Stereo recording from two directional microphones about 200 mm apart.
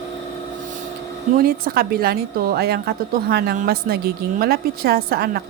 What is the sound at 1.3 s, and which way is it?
A woman's voice, 45° right (ahead or behind).